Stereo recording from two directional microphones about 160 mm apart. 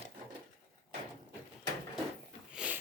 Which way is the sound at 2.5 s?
10° right (ahead or behind).